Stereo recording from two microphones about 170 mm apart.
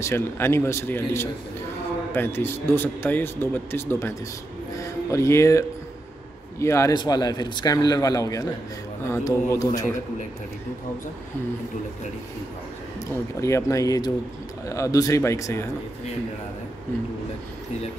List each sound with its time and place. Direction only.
0.0 s speech: 15° left (ahead or behind)
5.1 s speech: 15° left (ahead or behind)
13.4 s speech: 15° left (ahead or behind)